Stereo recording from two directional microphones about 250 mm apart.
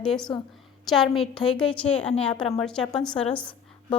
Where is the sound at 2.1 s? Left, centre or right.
Left.